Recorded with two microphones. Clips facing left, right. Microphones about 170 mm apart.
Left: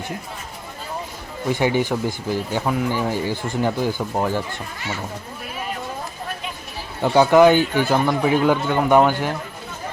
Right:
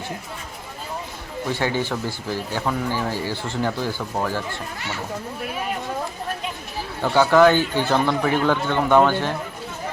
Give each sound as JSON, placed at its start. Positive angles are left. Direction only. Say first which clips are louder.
{"t": 1.5, "sound": "speech", "louder": "left 4 dB", "side_deg": 15}
{"t": 7.0, "sound": "speech", "louder": "left 2 dB", "side_deg": 15}